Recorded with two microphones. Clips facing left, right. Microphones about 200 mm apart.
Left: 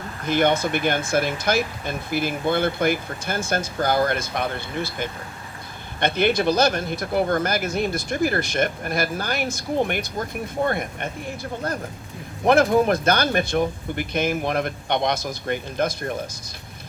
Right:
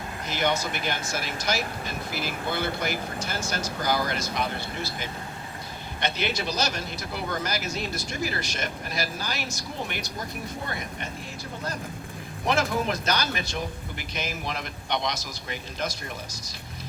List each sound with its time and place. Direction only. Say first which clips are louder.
0.3 s speech: left 8 dB; 55° left (ahead or behind)
12.5 s speech: left 9 dB; 55° left (ahead or behind)